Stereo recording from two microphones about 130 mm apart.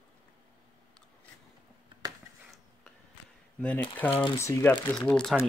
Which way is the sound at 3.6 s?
15° left (ahead or behind).